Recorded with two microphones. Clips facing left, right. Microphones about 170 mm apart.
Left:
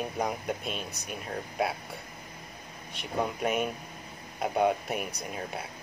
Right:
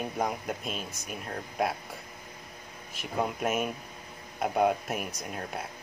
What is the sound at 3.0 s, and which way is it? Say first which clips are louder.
Speech: even; 5° right (ahead or behind).